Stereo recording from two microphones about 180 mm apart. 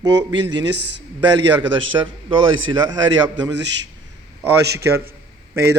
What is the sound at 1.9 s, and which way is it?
Speech, 20° right (ahead or behind).